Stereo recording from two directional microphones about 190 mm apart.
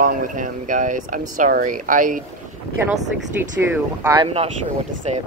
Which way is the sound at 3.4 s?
10° right (ahead or behind).